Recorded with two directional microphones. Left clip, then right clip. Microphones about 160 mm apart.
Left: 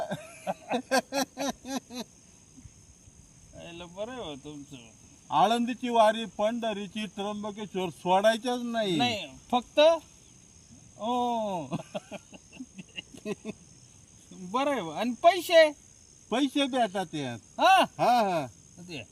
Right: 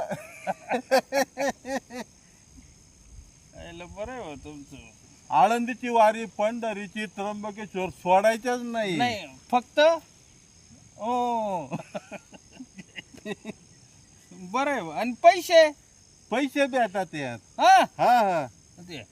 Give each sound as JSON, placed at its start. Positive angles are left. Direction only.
{"t": 0.0, "sound": "a sound", "side_deg": -15}
{"t": 3.6, "sound": "cricket", "side_deg": 15}
{"t": 5.3, "sound": "speech", "side_deg": -10}
{"t": 9.0, "sound": "speech", "side_deg": 15}
{"t": 11.0, "sound": "speech", "side_deg": -15}
{"t": 12.1, "sound": "a sound", "side_deg": 15}
{"t": 13.2, "sound": "a sound", "side_deg": -15}
{"t": 14.5, "sound": "speech", "side_deg": 15}
{"t": 16.3, "sound": "speech", "side_deg": -10}
{"t": 17.6, "sound": "speech", "side_deg": 15}
{"t": 17.9, "sound": "speech", "side_deg": -10}